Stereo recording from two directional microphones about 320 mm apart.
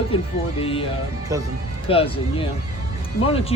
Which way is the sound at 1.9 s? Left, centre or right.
Centre.